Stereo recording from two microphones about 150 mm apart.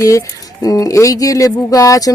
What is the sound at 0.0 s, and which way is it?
Speech, 20° left (ahead or behind).